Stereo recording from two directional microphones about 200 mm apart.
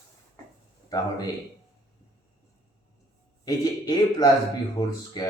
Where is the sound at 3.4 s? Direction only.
20° left (ahead or behind).